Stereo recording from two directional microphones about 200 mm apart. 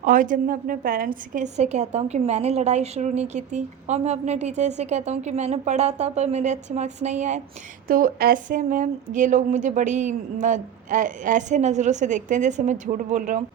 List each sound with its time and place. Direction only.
0.0 s a woman's voice: 40° right (ahead or behind)